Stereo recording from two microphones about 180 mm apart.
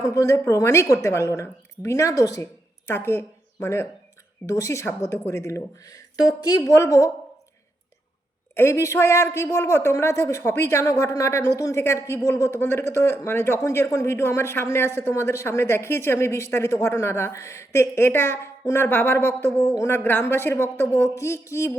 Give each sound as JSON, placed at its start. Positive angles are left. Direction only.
{"t": 0.0, "sound": "a man's voice", "side_deg": 15}
{"t": 8.5, "sound": "a man's voice", "side_deg": 15}